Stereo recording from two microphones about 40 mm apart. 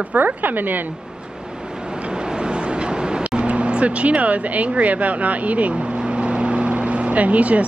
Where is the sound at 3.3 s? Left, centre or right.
Right.